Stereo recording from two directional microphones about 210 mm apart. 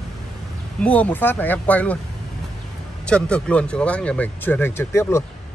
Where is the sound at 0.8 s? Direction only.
5° left (ahead or behind).